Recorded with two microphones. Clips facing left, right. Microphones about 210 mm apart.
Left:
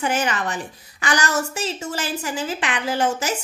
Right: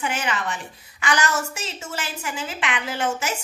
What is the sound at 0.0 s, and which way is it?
A woman's voice, 40° left (ahead or behind).